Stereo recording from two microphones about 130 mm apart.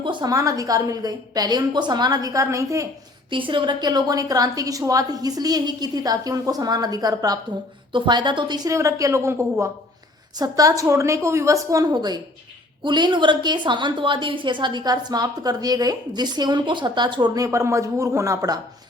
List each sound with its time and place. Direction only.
0.0 s a woman's voice: 35° right (ahead or behind)
3.2 s a woman's voice: 40° right (ahead or behind)